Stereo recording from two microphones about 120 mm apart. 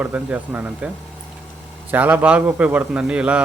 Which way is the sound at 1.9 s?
15° right (ahead or behind).